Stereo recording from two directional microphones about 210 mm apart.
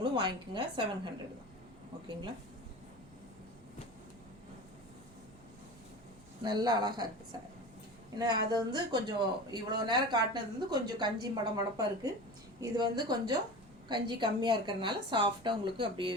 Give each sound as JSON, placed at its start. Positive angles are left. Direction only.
{"t": 0.0, "sound": "speech", "side_deg": -20}
{"t": 6.4, "sound": "speech", "side_deg": -20}
{"t": 8.2, "sound": "speech", "side_deg": -20}